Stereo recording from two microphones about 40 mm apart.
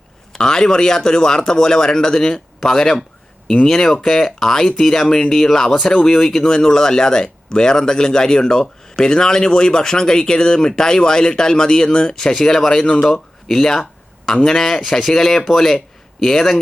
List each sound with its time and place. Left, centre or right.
0.3 s speech: centre